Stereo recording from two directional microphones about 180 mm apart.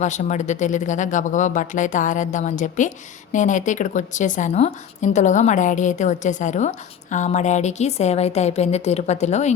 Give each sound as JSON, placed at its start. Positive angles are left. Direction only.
{"t": 0.0, "sound": "a woman's voice", "side_deg": 40}